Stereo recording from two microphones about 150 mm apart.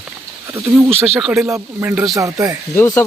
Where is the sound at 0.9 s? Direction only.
Centre (ahead or behind).